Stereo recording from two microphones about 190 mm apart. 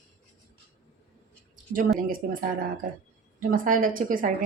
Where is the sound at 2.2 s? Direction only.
45° right (ahead or behind).